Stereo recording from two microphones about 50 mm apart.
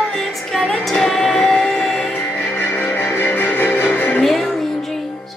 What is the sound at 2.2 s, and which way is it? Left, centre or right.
Music, left.